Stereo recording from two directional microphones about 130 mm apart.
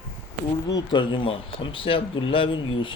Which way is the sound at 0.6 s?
40° left (ahead or behind).